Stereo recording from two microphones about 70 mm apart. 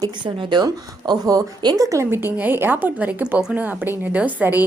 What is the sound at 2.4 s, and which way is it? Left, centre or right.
A woman's voice, right.